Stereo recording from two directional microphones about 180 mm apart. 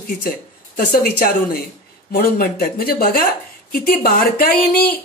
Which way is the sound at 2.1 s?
60° left (ahead or behind).